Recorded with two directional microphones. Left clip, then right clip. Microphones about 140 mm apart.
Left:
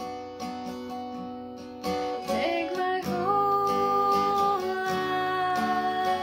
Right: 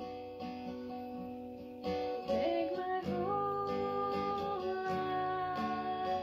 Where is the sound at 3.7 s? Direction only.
15° left (ahead or behind).